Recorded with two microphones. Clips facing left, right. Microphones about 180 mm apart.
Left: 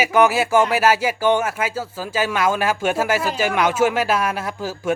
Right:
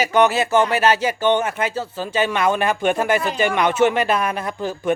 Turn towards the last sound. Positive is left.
turn(degrees=5)  # may be behind; listen again after turning